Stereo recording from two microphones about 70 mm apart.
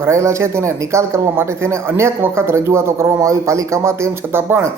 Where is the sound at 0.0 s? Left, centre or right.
Right.